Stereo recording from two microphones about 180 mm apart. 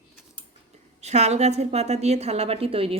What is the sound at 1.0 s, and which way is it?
Speech, 40° right (ahead or behind).